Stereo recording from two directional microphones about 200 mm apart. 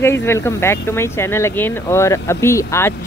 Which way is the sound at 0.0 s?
10° left (ahead or behind).